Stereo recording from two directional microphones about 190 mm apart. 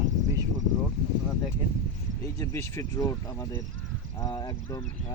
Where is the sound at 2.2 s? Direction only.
15° left (ahead or behind).